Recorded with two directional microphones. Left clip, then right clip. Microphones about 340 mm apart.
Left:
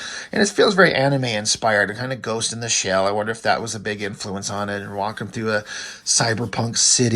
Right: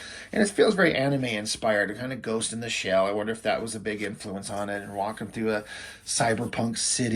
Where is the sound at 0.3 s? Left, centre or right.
Centre.